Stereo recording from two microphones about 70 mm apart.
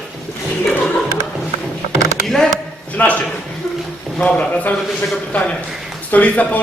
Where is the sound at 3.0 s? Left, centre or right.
Left.